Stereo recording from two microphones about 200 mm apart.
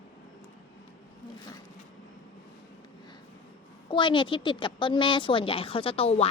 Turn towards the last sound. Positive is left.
turn(degrees=30)  # may be behind; listen again after turning